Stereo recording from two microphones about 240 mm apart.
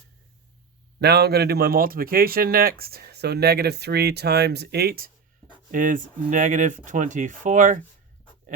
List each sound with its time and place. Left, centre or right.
0.9 s speech: right